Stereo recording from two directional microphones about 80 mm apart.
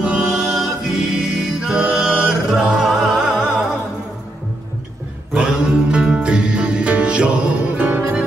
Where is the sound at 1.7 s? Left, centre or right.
Centre.